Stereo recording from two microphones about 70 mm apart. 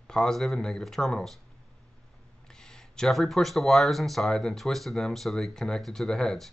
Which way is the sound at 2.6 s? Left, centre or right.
Centre.